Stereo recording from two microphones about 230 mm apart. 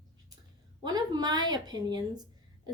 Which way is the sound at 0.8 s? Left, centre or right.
Centre.